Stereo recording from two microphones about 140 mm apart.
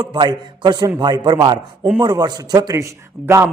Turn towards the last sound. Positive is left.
turn(degrees=-20)  # may be behind; listen again after turning